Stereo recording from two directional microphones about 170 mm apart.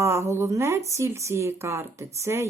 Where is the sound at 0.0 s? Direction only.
15° right (ahead or behind).